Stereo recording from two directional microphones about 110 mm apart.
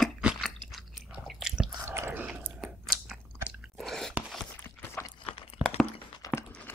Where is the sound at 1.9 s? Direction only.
20° right (ahead or behind).